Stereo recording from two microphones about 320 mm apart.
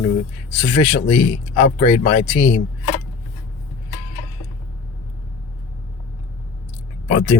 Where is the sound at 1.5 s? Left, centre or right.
Centre.